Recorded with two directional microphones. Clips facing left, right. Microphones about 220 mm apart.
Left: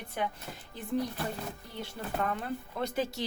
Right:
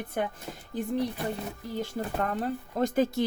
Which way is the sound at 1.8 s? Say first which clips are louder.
Right 4 dB; 45° right (ahead or behind).